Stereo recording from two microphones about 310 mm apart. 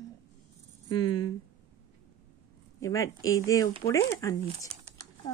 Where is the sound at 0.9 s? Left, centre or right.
Centre.